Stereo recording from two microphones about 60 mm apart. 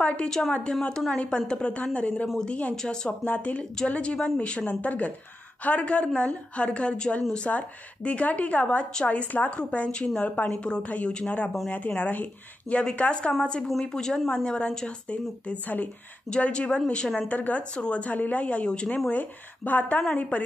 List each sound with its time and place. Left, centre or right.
0.0 s a woman's voice: left
2.7 s speech: centre
3.1 s speech: left
13.7 s speech: centre
16.3 s speech: centre
17.3 s speech: left